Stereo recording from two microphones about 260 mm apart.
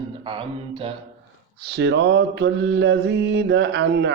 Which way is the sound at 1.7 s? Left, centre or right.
Right.